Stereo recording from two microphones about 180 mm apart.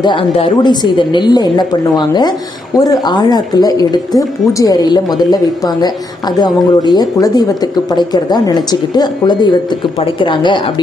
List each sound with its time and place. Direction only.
0.0 s speech: 30° left (ahead or behind)